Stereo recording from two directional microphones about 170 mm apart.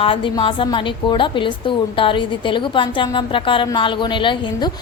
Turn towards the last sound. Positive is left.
turn(degrees=25)  # may be behind; listen again after turning